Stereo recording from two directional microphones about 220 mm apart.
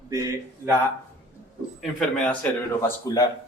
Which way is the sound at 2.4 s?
5° left (ahead or behind).